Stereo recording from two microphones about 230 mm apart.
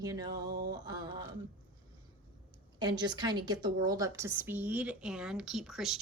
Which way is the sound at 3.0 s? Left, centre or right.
Centre.